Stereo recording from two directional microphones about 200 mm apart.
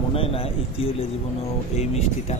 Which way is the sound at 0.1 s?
30° left (ahead or behind).